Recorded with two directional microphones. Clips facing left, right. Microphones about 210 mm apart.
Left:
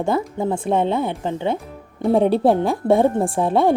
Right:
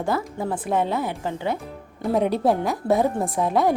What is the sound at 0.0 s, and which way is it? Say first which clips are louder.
A woman's voice: left 4 dB; 25° left (ahead or behind).